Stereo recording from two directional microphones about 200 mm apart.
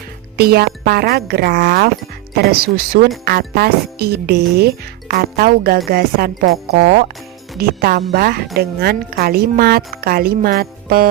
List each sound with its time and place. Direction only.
0.3 s speech: 50° right (ahead or behind)